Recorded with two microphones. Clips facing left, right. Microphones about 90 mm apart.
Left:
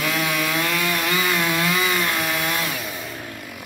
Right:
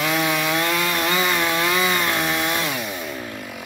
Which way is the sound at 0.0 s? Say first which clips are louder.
Right 2 dB; 25° right (ahead or behind).